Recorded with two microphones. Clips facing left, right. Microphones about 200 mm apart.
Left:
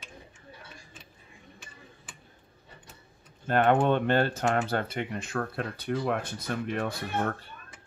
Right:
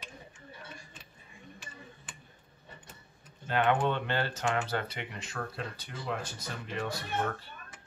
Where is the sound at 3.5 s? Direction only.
50° left (ahead or behind).